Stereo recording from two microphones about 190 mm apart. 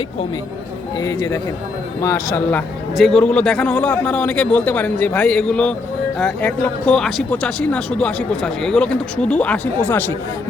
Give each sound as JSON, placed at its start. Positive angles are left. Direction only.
{"t": 0.9, "sound": "speech", "side_deg": 20}